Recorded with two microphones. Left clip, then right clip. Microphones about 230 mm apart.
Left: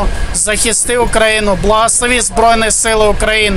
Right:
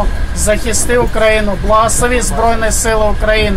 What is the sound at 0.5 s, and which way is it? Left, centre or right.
Speech, left.